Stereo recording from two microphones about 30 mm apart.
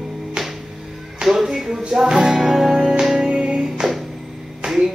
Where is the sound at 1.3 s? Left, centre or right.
Centre.